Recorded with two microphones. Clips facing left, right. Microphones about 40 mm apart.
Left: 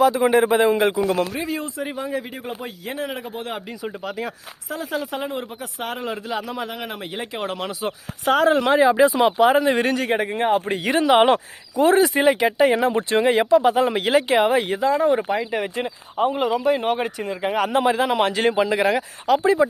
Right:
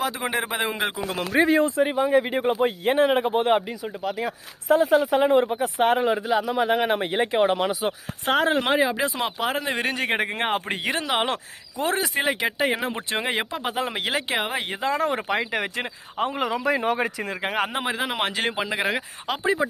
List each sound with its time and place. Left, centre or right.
0.0 s speech: centre
1.3 s a man's voice: right
4.0 s speech: centre
4.7 s a man's voice: right
6.1 s speech: centre
6.7 s a man's voice: right
7.3 s speech: right
7.7 s speech: centre
8.2 s a man's voice: right
8.7 s speech: centre
10.1 s speech: right
10.8 s speech: centre
14.9 s speech: right
17.7 s speech: centre